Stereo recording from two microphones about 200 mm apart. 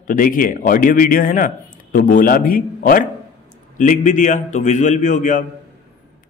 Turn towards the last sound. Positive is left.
turn(degrees=40)  # may be behind; listen again after turning